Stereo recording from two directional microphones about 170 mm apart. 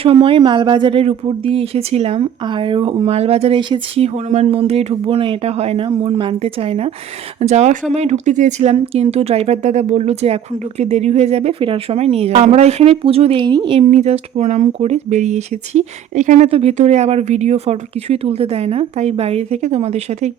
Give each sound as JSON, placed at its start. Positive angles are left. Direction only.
{"t": 0.0, "sound": "speech", "side_deg": -30}
{"t": 13.9, "sound": "speech", "side_deg": -40}
{"t": 16.5, "sound": "speech", "side_deg": -35}